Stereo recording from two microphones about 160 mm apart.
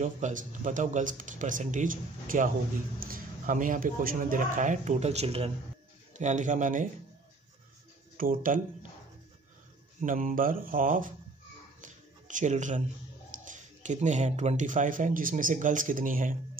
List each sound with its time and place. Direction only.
0.0 s speech: 50° right (ahead or behind)
6.1 s speech: 50° right (ahead or behind)
8.2 s speech: 60° right (ahead or behind)
10.0 s speech: 60° right (ahead or behind)
11.8 s a sound: 55° right (ahead or behind)
13.5 s speech: 50° right (ahead or behind)